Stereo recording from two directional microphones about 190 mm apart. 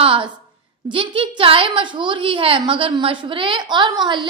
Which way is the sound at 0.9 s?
25° right (ahead or behind).